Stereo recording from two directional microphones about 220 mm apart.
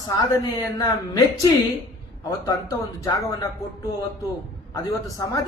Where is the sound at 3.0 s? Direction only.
15° left (ahead or behind).